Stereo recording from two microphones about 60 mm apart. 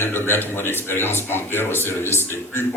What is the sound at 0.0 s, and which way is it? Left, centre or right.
Speech, left.